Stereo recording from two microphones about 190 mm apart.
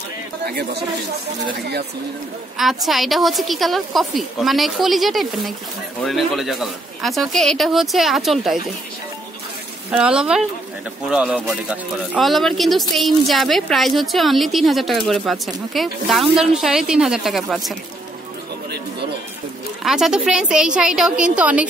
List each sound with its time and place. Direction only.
0.5 s speech: 55° right (ahead or behind)
2.5 s speech: centre (ahead or behind)
9.8 s speech: 5° right (ahead or behind)
19.8 s speech: centre (ahead or behind)